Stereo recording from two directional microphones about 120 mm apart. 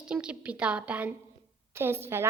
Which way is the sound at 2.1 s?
20° right (ahead or behind).